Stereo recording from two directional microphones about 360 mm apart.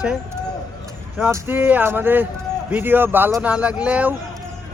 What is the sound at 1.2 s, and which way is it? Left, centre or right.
A man's voice, centre.